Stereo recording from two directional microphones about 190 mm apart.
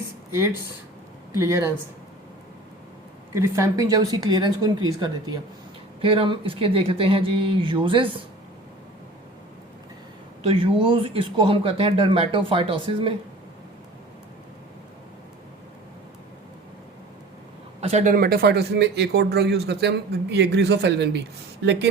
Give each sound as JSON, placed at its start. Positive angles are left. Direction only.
{"t": 0.3, "sound": "speech", "side_deg": -15}
{"t": 3.3, "sound": "speech", "side_deg": -15}
{"t": 10.4, "sound": "speech", "side_deg": -30}
{"t": 17.7, "sound": "speech", "side_deg": -35}